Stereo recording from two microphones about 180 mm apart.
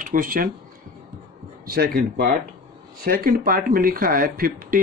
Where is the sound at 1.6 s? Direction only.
55° right (ahead or behind).